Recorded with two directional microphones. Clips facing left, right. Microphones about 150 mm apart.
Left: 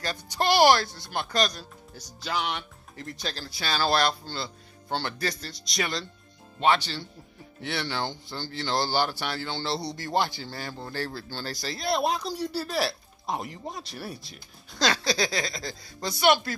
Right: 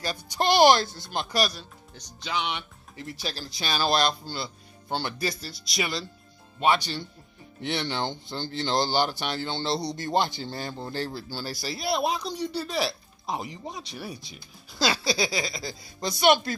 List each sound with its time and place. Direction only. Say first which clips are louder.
0.0 s speech: right 1 dB; 10° right (ahead or behind)
1.1 s speech: even; 10° right (ahead or behind)
2.2 s speech: even; centre (ahead or behind)
3.4 s speech: even; 15° right (ahead or behind)
16.0 s speech: right 1 dB; 20° right (ahead or behind)